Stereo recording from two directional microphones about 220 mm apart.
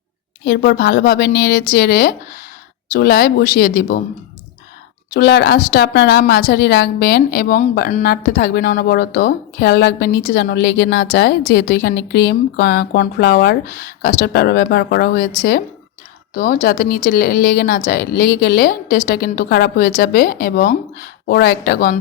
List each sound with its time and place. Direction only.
0.4 s speech: 45° left (ahead or behind)
5.1 s speech: 45° left (ahead or behind)